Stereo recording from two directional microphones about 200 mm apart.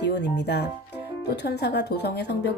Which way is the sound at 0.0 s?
60° left (ahead or behind).